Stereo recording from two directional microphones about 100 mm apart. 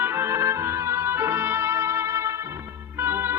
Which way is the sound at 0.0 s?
25° right (ahead or behind).